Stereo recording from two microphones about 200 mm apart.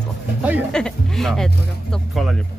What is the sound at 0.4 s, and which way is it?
Speech, 10° right (ahead or behind).